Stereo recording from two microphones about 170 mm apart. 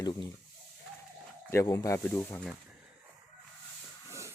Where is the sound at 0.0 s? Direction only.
25° left (ahead or behind).